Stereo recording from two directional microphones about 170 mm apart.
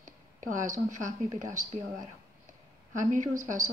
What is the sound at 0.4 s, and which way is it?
Speech, 50° right (ahead or behind).